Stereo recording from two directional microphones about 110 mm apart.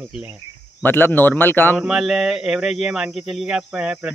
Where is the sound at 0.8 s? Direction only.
15° left (ahead or behind).